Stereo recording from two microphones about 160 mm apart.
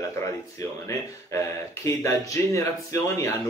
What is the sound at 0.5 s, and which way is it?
Speech, 20° left (ahead or behind).